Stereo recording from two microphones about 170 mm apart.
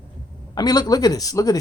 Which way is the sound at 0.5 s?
25° left (ahead or behind).